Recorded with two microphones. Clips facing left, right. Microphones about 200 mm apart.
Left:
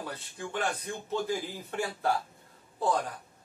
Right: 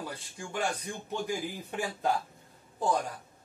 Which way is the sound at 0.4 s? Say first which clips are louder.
Even; 10° right (ahead or behind).